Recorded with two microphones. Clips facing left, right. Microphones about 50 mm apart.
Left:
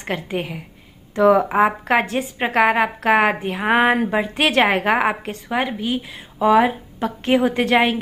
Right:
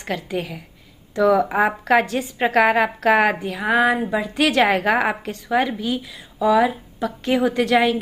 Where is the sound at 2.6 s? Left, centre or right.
Centre.